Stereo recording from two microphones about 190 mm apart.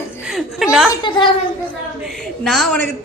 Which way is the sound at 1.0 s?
25° left (ahead or behind).